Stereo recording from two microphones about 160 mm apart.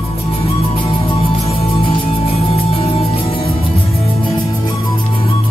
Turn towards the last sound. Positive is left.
turn(degrees=35)  # may be behind; listen again after turning